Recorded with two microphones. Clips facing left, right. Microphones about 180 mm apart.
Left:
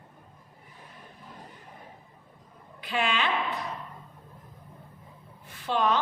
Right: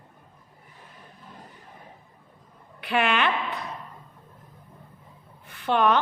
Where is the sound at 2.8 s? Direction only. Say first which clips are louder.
Right 5 dB; 65° right (ahead or behind).